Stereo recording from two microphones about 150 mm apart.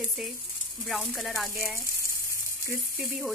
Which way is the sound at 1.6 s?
15° right (ahead or behind).